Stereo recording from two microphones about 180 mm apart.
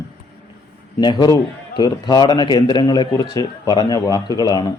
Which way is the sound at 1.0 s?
20° left (ahead or behind).